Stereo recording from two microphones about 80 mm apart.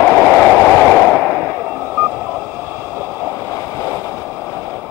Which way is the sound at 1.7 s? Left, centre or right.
Right.